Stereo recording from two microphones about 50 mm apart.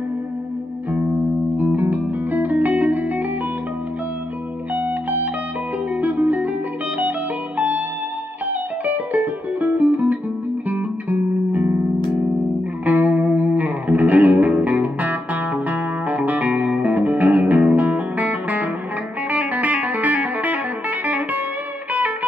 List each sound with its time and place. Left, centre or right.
1.8 s music: right
4.7 s music: right
8.8 s music: right
12.8 s music: right